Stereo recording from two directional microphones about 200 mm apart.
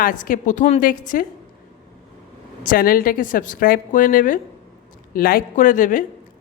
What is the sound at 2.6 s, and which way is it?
A woman's voice, 45° left (ahead or behind).